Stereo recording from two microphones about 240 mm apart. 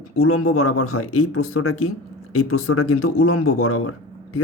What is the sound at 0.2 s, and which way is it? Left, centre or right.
Speech, left.